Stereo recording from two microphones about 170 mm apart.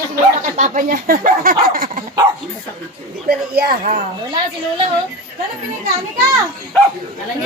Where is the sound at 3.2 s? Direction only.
60° right (ahead or behind).